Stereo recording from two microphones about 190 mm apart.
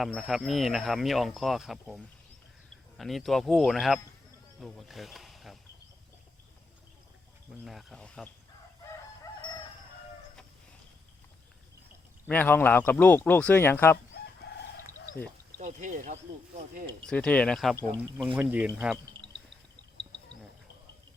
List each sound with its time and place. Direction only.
0.0 s speech: centre (ahead or behind)
7.6 s speech: centre (ahead or behind)
12.3 s speech: 10° left (ahead or behind)
15.5 s speech: 40° right (ahead or behind)
17.0 s speech: 5° left (ahead or behind)